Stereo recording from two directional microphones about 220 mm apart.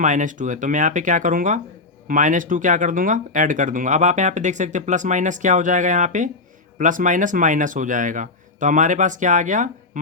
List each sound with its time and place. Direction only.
0.0 s speech: 35° right (ahead or behind)